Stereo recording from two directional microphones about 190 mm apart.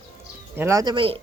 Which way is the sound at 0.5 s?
15° right (ahead or behind).